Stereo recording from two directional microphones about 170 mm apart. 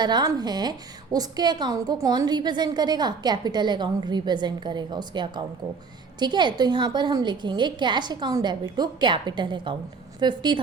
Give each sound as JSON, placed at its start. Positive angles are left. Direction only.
{"t": 0.0, "sound": "a woman's voice", "side_deg": -25}